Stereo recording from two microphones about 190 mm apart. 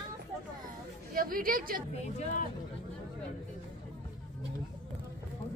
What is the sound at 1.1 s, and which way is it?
Speech, 50° right (ahead or behind).